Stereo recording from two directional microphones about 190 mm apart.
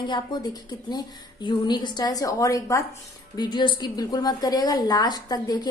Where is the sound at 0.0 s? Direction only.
20° left (ahead or behind).